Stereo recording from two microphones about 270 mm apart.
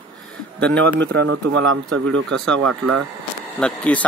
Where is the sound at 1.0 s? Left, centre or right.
Right.